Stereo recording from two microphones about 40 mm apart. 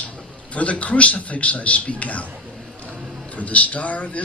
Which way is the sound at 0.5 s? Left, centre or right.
Left.